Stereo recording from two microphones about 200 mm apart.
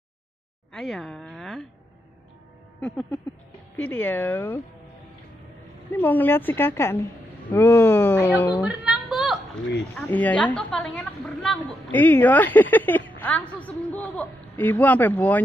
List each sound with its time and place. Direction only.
0.7 s a woman's voice: centre (ahead or behind)
2.8 s a woman's voice: centre (ahead or behind)
5.9 s a woman's voice: 10° left (ahead or behind)
8.6 s a sound: centre (ahead or behind)
9.9 s a woman's voice: 10° left (ahead or behind)